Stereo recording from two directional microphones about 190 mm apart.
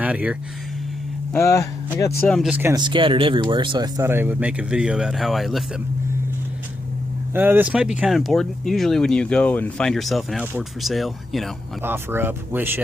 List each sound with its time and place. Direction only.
0.0 s speech: 5° right (ahead or behind)
1.3 s speech: 15° left (ahead or behind)
2.3 s speech: 5° right (ahead or behind)
2.7 s speech: 25° right (ahead or behind); by 5.6 s centre (ahead or behind)
7.3 s speech: 10° right (ahead or behind)
11.8 s speech: 10° right (ahead or behind)